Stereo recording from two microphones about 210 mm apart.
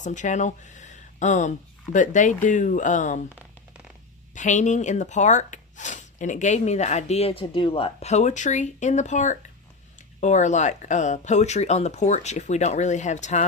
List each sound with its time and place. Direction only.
0.0 s speech: 35° left (ahead or behind)
4.4 s speech: 35° left (ahead or behind)